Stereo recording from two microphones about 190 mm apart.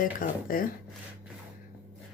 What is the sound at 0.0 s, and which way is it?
Speech, 45° left (ahead or behind).